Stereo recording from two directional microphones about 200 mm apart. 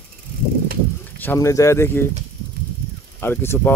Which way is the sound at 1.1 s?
10° left (ahead or behind).